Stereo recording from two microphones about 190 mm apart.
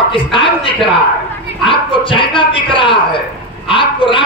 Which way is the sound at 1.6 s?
25° left (ahead or behind).